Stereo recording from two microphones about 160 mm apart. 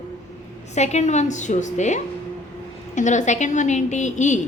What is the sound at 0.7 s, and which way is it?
A woman's voice, 45° left (ahead or behind).